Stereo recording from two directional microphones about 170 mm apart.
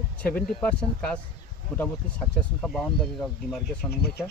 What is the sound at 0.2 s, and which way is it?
Speech, 10° left (ahead or behind).